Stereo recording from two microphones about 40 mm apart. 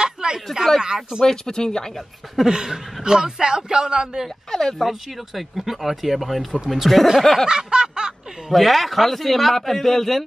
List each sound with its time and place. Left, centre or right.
0.0 s a sound: right
0.7 s a man's voice: centre
1.2 s speech: centre
2.4 s a man's voice: centre
4.5 s speech: centre
4.8 s speech: centre
7.4 s snicker: centre
8.5 s speech: centre